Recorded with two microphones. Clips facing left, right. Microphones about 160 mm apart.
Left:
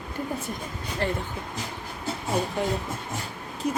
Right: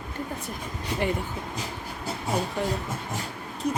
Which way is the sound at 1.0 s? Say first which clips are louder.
Right 1 dB; 15° right (ahead or behind).